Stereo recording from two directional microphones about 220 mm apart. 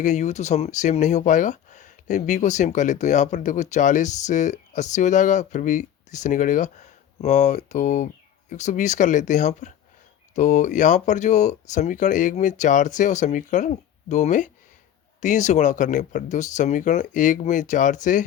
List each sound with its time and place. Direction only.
0.0 s speech: 30° left (ahead or behind)